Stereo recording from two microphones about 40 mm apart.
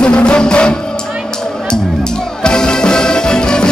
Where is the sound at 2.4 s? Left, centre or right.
Centre.